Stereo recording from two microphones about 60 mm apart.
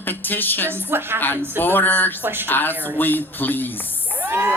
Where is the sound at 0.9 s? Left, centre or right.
Right.